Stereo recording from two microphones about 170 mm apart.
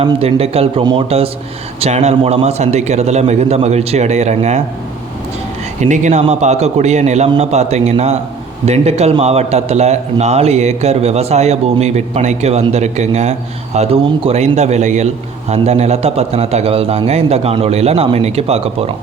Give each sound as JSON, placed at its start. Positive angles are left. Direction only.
{"t": 0.0, "sound": "a man's voice", "side_deg": -35}
{"t": 5.8, "sound": "a man's voice", "side_deg": -45}